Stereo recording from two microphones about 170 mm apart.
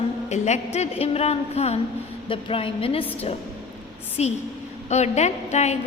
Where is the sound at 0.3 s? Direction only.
40° left (ahead or behind).